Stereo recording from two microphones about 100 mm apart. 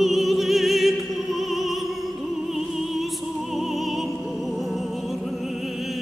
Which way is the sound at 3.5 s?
Centre (ahead or behind).